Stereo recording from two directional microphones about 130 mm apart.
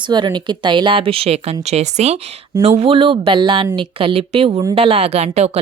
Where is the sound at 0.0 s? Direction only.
35° right (ahead or behind).